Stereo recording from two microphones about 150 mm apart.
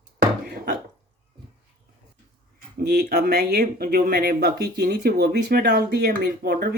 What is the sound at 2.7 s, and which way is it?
Speech, 90° right.